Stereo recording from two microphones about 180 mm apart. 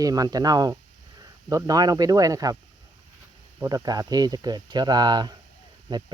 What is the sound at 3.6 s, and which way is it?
Speech, 20° right (ahead or behind).